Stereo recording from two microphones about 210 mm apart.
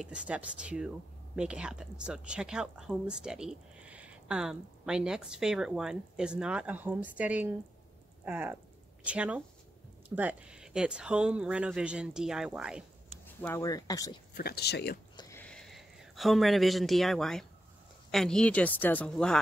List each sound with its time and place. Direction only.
0.0 s speech: 5° right (ahead or behind)
13.4 s speech: 15° left (ahead or behind)
14.3 s speech: 45° left (ahead or behind)
15.1 s a sound: 10° left (ahead or behind)
18.1 s speech: 5° left (ahead or behind)